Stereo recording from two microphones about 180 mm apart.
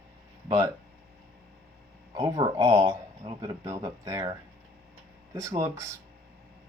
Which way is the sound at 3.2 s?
30° right (ahead or behind).